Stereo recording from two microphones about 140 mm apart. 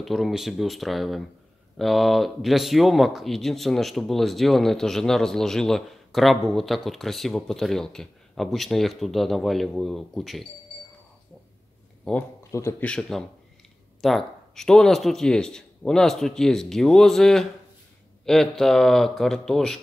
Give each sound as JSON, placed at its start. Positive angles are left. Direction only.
{"t": 0.0, "sound": "speech", "side_deg": 0}
{"t": 12.0, "sound": "speech", "side_deg": 10}
{"t": 12.4, "sound": "a sound", "side_deg": 20}
{"t": 12.8, "sound": "speech", "side_deg": 5}